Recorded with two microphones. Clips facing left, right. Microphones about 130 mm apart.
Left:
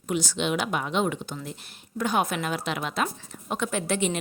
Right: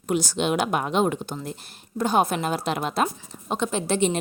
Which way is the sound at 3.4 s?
25° right (ahead or behind).